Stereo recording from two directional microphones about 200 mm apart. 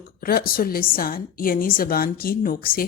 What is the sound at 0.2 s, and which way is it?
Speech, 45° left (ahead or behind).